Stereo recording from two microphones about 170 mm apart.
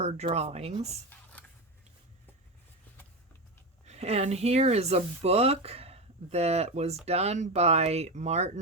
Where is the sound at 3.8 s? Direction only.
40° right (ahead or behind).